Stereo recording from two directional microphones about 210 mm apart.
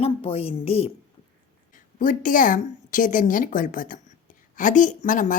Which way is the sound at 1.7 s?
40° left (ahead or behind).